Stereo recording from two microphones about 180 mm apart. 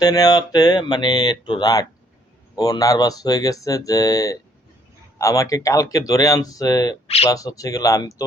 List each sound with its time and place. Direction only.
0.0 s speech: 20° left (ahead or behind)